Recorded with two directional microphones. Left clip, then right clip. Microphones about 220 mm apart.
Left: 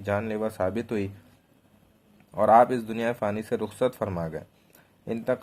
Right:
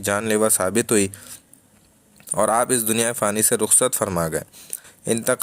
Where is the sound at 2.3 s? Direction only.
30° right (ahead or behind).